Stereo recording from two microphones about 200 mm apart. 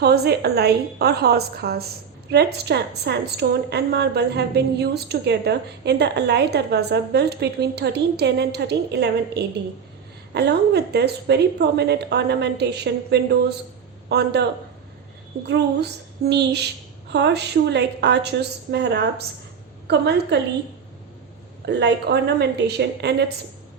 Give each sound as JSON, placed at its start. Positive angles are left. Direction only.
{"t": 0.0, "sound": "a woman's voice", "side_deg": -50}
{"t": 16.2, "sound": "a woman's voice", "side_deg": -55}
{"t": 19.9, "sound": "a woman's voice", "side_deg": -55}
{"t": 21.7, "sound": "a woman's voice", "side_deg": -55}